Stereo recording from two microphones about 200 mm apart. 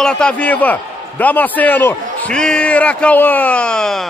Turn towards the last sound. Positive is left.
turn(degrees=5)  # may be behind; listen again after turning